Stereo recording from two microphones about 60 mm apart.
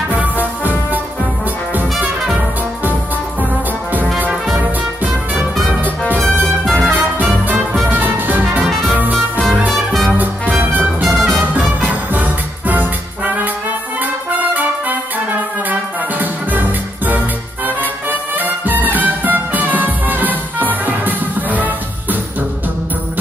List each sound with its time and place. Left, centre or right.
0.1 s music: right
5.0 s music: right
14.5 s trumpet: right
15.7 s music: right
18.4 s music: right